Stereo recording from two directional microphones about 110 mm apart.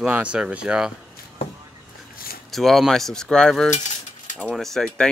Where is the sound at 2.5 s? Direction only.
Centre (ahead or behind).